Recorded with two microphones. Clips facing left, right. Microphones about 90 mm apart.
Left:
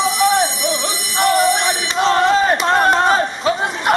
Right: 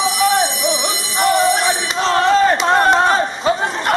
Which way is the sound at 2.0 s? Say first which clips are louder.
Left 1 dB; 10° left (ahead or behind).